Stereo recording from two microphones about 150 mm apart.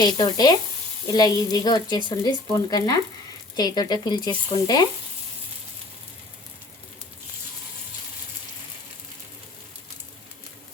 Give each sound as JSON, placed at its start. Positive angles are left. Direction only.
{"t": 0.0, "sound": "speech", "side_deg": 30}